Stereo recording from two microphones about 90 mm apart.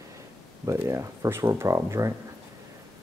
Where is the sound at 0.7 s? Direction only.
35° right (ahead or behind).